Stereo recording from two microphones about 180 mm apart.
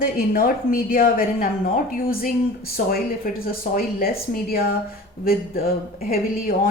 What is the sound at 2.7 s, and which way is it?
Speech, 55° left (ahead or behind).